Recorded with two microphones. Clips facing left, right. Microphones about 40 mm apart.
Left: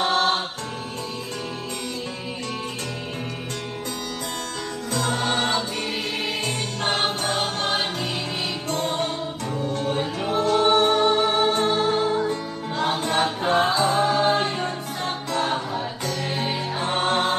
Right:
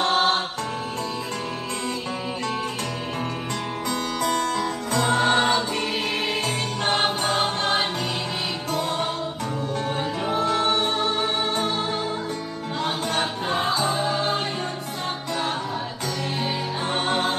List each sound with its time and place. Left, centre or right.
0.1 s music: centre
4.9 s music: centre
6.8 s music: centre
7.3 s music: centre
8.7 s music: centre
9.8 s music: centre